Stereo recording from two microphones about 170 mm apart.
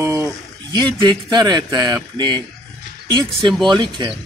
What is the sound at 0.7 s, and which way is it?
Speech, 25° right (ahead or behind).